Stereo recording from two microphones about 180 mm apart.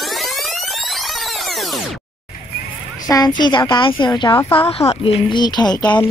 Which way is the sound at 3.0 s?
20° left (ahead or behind).